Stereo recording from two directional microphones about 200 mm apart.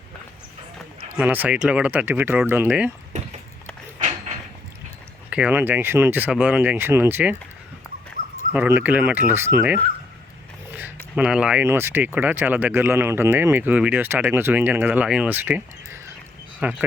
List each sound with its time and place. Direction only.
1.1 s speech: 10° right (ahead or behind)
3.1 s a sound: 35° right (ahead or behind)
5.3 s speech: 5° right (ahead or behind)
8.5 s speech: 10° right (ahead or behind)
11.1 s speech: 5° right (ahead or behind)